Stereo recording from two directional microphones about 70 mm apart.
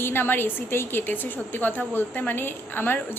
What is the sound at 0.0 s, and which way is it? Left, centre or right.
A woman's voice, left.